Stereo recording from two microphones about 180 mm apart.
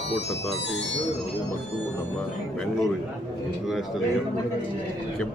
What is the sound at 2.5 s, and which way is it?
Speech, 5° left (ahead or behind).